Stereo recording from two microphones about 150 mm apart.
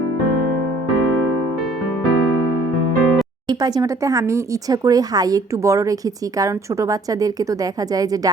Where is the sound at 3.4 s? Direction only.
25° right (ahead or behind).